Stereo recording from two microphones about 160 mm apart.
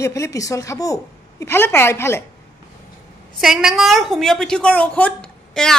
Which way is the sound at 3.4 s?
Centre (ahead or behind).